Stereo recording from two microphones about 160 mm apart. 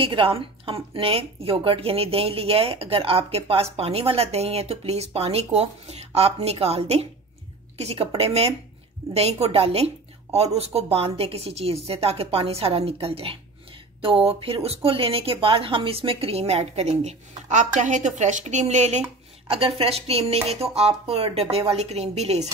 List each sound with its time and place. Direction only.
0.0 s a woman's voice: 35° right (ahead or behind)